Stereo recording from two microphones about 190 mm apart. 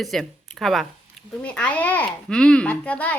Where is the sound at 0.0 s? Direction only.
Centre (ahead or behind).